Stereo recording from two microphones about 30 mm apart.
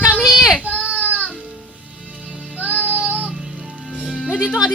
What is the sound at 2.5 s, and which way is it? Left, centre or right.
Music, right.